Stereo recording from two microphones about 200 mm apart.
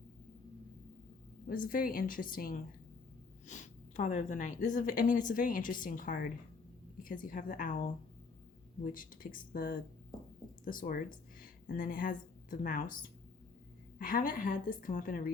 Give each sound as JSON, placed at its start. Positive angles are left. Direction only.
{"t": 1.5, "sound": "a woman's voice", "side_deg": 45}
{"t": 8.8, "sound": "a woman's voice", "side_deg": 45}